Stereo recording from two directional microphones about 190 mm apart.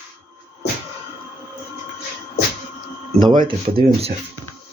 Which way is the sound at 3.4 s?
30° right (ahead or behind).